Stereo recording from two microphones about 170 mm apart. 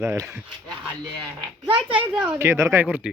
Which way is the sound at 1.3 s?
25° right (ahead or behind).